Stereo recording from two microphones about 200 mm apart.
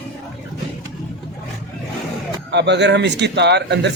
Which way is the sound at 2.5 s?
60° right (ahead or behind).